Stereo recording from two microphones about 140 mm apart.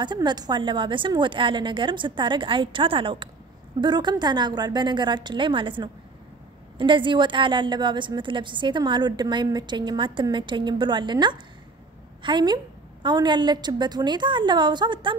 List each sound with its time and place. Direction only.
0.0 s a woman's voice: 30° right (ahead or behind)